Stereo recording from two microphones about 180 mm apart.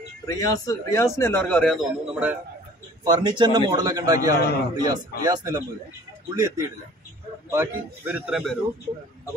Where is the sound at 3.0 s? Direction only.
20° right (ahead or behind); by 8.6 s centre (ahead or behind).